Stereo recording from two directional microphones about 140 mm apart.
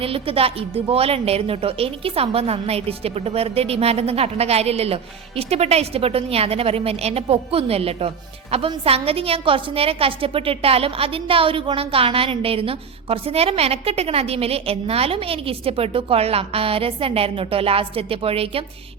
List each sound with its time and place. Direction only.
0.0 s a woman's voice: 40° right (ahead or behind)